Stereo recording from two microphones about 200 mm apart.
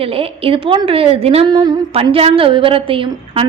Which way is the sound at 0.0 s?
30° right (ahead or behind).